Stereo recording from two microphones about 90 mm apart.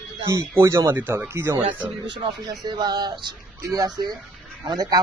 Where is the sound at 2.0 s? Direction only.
60° right (ahead or behind).